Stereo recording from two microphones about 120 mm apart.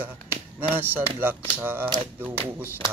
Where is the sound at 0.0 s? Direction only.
15° right (ahead or behind).